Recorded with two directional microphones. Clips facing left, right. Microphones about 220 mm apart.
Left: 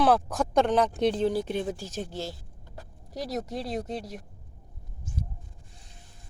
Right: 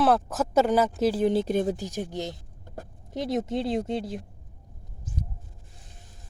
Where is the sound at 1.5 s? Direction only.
40° right (ahead or behind).